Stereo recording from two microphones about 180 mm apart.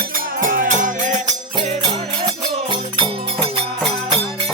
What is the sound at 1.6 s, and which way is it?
Music, 30° right (ahead or behind).